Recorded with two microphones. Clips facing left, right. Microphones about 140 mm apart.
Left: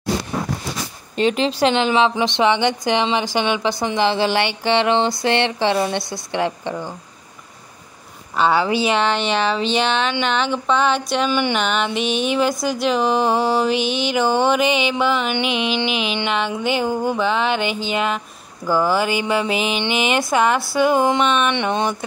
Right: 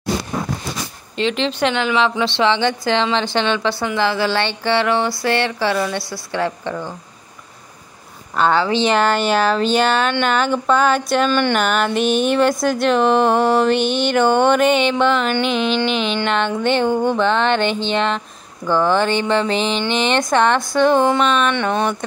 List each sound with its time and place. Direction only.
1.2 s speech: 40° left (ahead or behind); by 6.9 s 20° left (ahead or behind)
8.4 s speech: 5° left (ahead or behind)
8.9 s a sound: centre (ahead or behind)
11.2 s speech: 10° left (ahead or behind)
11.5 s a sound: 5° right (ahead or behind)
16.3 s speech: 5° left (ahead or behind)